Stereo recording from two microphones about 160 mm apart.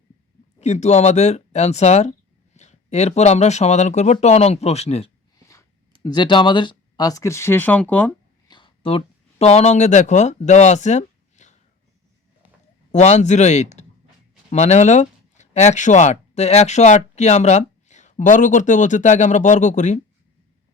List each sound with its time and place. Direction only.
0.6 s speech: 45° left (ahead or behind)
6.0 s speech: 25° left (ahead or behind); by 8.1 s 10° left (ahead or behind)
8.4 s speech: 30° left (ahead or behind); by 11.5 s 45° left (ahead or behind)
12.9 s speech: 45° left (ahead or behind)